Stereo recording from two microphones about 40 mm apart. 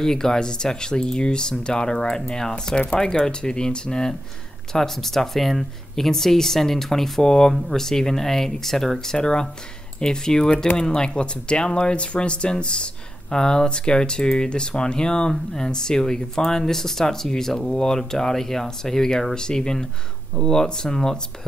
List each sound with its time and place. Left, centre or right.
0.0 s speech: centre